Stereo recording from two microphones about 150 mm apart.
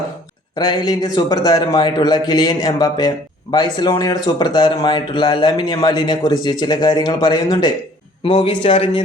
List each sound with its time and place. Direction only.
0.5 s a man's voice: 25° left (ahead or behind)